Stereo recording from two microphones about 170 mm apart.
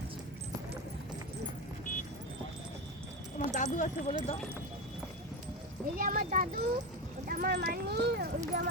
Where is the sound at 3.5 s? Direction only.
45° left (ahead or behind).